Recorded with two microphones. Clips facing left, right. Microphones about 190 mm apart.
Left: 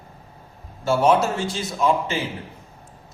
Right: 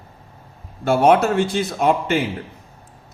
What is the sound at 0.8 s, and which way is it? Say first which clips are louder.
A man's voice: right 3 dB; 60° right (ahead or behind).